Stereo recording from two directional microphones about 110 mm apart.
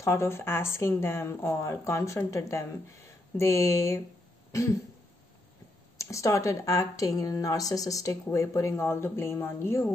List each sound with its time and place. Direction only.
0.0 s speech: 25° left (ahead or behind)
4.5 s cough: 30° left (ahead or behind)
5.9 s speech: 25° left (ahead or behind)